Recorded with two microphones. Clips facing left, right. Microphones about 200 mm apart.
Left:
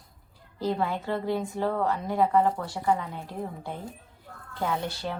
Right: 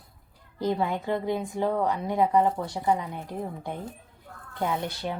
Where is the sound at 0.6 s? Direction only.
15° right (ahead or behind).